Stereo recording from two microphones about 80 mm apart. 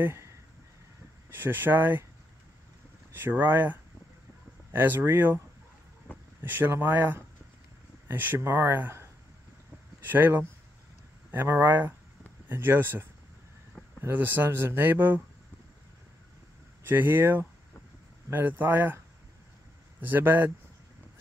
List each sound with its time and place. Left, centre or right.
0.0 s speech: right
1.3 s speech: right
3.1 s speech: right
6.1 s vehicle: left
6.4 s speech: right
16.8 s speech: right
20.1 s speech: right